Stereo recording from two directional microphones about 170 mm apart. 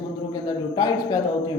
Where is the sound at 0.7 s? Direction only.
20° left (ahead or behind).